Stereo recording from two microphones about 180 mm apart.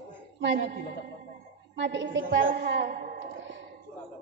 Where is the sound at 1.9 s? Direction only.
80° right.